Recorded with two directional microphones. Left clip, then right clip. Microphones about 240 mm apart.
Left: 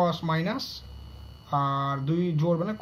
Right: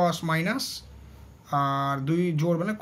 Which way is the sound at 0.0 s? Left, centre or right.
Centre.